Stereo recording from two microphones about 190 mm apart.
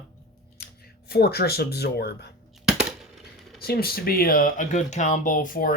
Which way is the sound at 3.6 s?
55° left (ahead or behind).